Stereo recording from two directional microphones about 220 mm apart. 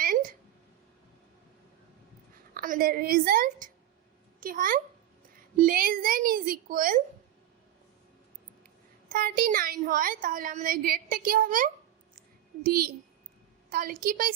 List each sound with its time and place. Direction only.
0.0 s a sound: 40° right (ahead or behind)
2.6 s a woman's voice: 40° right (ahead or behind)
9.0 s a woman's voice: 40° right (ahead or behind)